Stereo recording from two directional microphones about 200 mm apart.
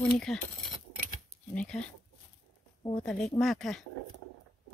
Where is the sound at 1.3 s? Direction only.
30° right (ahead or behind).